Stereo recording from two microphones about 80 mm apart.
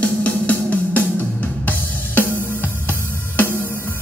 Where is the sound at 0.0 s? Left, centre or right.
Centre.